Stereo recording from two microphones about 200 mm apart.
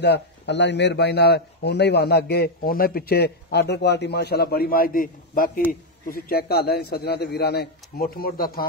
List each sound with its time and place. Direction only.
0.0 s a man's voice: 55° left (ahead or behind)